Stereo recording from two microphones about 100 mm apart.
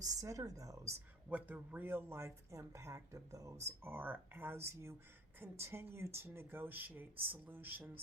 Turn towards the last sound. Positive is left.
turn(degrees=-20)  # may be behind; listen again after turning